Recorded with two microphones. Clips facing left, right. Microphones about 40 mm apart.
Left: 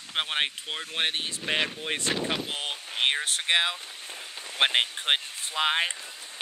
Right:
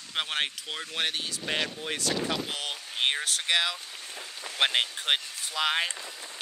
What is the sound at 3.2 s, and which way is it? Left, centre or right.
Speech, left.